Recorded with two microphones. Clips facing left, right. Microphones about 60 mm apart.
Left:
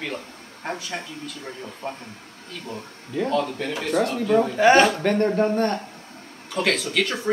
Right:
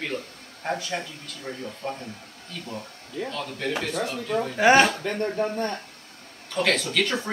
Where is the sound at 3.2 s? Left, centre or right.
Left.